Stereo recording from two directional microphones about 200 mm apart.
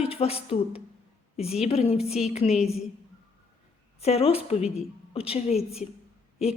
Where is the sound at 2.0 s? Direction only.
5° right (ahead or behind).